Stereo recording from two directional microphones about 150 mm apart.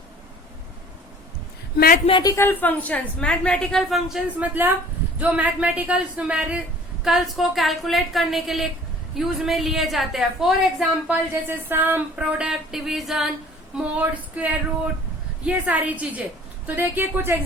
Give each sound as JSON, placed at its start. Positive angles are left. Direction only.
{"t": 1.7, "sound": "a woman's voice", "side_deg": 85}
{"t": 2.2, "sound": "a woman's voice", "side_deg": 15}
{"t": 11.7, "sound": "a woman's voice", "side_deg": -15}